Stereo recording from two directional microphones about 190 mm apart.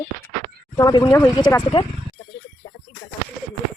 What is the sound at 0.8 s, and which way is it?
Speech, 20° left (ahead or behind).